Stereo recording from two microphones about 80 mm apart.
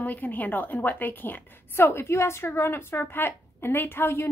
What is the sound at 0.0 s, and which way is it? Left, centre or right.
A woman's voice, left.